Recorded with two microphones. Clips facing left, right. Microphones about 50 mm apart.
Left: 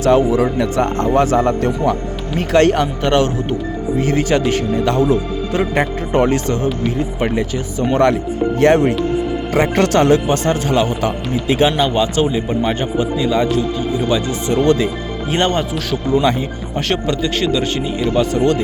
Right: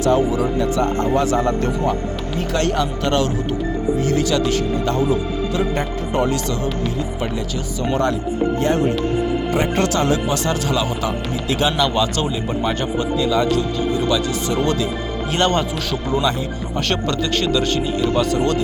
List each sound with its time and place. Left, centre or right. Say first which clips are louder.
0.0 s speech: left 4 dB; left
5.7 s speech: left 5 dB; left
7.9 s speech: left 5 dB; left
9.8 s speech: left 6 dB; left
10.3 s speech: left 4 dB; left
11.4 s speech: left 4 dB; left
15.3 s speech: left 2 dB; centre